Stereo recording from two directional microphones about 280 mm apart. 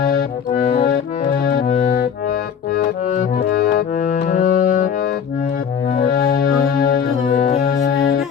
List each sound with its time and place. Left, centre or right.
0.6 s accordion: left
1.5 s music: left
3.5 s music: left
6.1 s music: left